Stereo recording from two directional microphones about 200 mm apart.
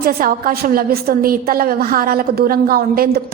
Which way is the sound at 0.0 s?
45° right (ahead or behind).